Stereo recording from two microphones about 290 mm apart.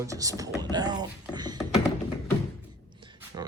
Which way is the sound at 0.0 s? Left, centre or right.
Centre.